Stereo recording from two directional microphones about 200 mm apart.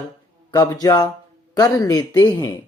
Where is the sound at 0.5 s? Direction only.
20° left (ahead or behind).